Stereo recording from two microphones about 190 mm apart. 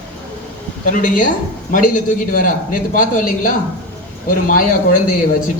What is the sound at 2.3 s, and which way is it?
A man's voice, 45° left (ahead or behind).